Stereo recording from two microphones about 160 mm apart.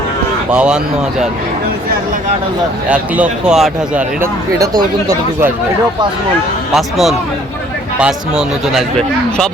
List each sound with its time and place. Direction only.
0.5 s speech: 5° right (ahead or behind)
2.9 s speech: 10° right (ahead or behind)
4.6 s speech: 25° right (ahead or behind)
6.7 s speech: centre (ahead or behind)